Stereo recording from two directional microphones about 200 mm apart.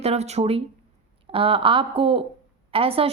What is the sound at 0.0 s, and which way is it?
Speech, 30° right (ahead or behind).